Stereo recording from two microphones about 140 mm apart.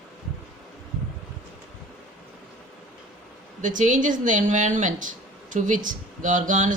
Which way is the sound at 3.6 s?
65° right (ahead or behind).